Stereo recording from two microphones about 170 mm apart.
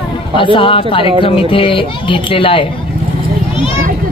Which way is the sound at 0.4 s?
30° left (ahead or behind).